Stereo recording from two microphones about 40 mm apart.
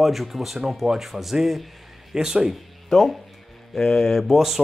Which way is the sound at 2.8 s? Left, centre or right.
Centre.